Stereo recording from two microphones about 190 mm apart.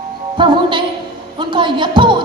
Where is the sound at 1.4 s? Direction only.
25° right (ahead or behind).